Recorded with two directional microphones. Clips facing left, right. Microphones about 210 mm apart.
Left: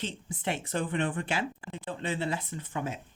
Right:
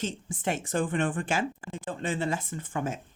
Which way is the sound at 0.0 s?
45° right (ahead or behind).